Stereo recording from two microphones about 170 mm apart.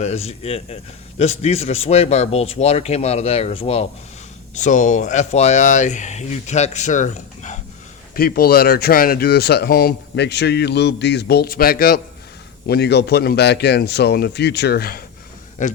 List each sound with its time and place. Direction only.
0.0 s a man's voice: 40° left (ahead or behind)
4.5 s speech: 45° left (ahead or behind)
8.1 s speech: 60° left (ahead or behind)
12.6 s a man's voice: 75° left (ahead or behind)
15.6 s speech: 45° left (ahead or behind)